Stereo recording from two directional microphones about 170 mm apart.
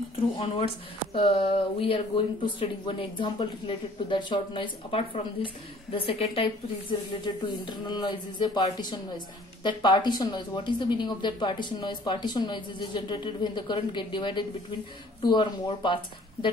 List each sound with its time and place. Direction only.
1.1 s a woman's voice: 35° left (ahead or behind)